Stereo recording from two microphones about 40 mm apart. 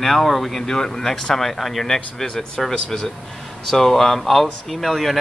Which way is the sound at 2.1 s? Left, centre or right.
Centre.